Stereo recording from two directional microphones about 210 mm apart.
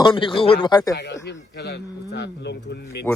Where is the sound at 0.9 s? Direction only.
55° left (ahead or behind).